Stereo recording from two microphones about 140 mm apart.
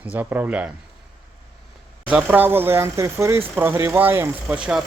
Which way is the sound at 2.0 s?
10° right (ahead or behind).